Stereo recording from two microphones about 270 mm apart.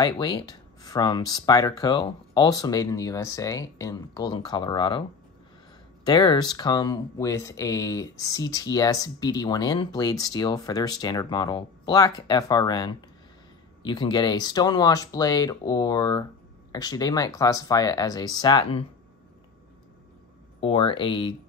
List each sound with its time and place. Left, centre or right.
0.0 s speech: centre
6.0 s speech: centre
20.6 s speech: centre